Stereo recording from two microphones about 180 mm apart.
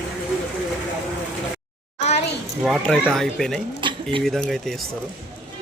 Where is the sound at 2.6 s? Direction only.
Centre (ahead or behind).